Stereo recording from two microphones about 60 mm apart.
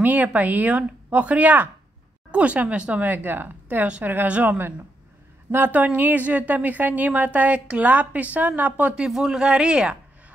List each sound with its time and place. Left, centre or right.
0.0 s a woman's voice: right
9.0 s speech: centre